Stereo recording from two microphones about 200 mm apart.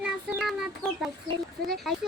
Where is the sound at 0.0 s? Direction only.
Centre (ahead or behind).